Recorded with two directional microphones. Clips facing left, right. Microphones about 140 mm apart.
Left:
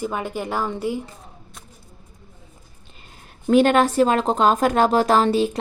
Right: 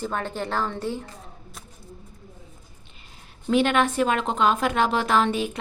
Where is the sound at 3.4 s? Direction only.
45° left (ahead or behind).